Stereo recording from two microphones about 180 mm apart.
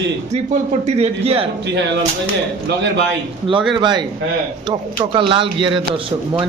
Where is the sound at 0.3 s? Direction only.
40° right (ahead or behind).